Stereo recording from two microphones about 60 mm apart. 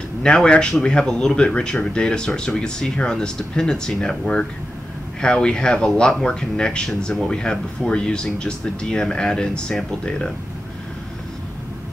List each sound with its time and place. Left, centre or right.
0.2 s speech: centre